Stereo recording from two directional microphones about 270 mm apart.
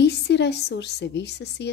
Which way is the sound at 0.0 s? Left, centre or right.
Left.